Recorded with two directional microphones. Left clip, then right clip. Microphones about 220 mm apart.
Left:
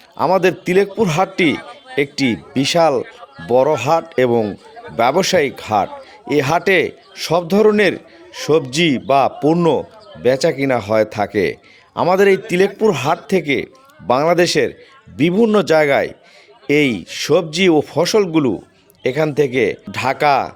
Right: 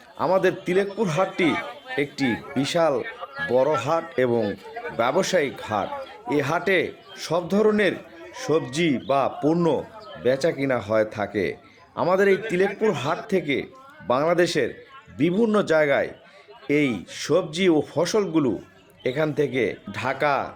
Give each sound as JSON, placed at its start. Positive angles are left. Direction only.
{"t": 0.2, "sound": "a man's voice", "side_deg": 40}